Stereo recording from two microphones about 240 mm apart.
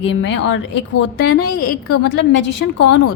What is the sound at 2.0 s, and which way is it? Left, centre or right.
Speech, left.